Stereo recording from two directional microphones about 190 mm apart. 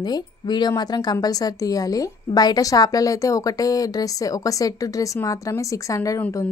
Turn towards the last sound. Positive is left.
turn(degrees=15)  # may be behind; listen again after turning